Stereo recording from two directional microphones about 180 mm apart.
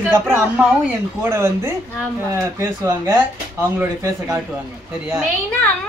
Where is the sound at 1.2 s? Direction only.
15° right (ahead or behind).